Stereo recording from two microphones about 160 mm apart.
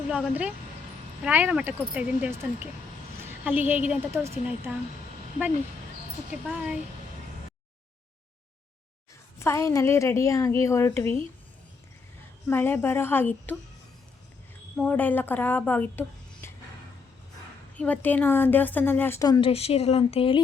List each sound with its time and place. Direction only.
0.1 s speech: 10° right (ahead or behind)
6.5 s speech: 5° right (ahead or behind)
9.4 s a woman's voice: 20° left (ahead or behind)
12.5 s a woman's voice: 15° left (ahead or behind)
14.8 s a woman's voice: 10° left (ahead or behind)
17.7 s a woman's voice: 10° left (ahead or behind)
19.4 s speech: 35° left (ahead or behind)